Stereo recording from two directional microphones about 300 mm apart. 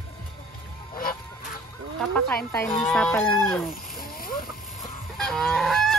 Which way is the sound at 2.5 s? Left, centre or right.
Centre.